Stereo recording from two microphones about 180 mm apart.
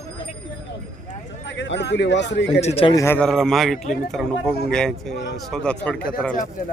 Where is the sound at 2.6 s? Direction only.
35° left (ahead or behind).